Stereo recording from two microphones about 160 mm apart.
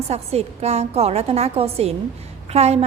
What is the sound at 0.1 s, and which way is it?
A woman's voice, 40° right (ahead or behind).